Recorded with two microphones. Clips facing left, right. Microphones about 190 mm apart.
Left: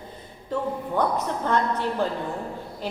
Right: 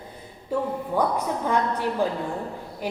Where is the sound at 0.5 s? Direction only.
10° right (ahead or behind).